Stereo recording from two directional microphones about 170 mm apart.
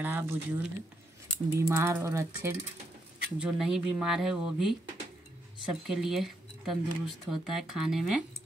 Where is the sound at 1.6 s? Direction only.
15° right (ahead or behind).